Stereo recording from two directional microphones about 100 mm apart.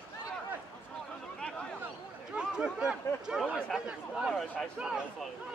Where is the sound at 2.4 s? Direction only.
10° right (ahead or behind).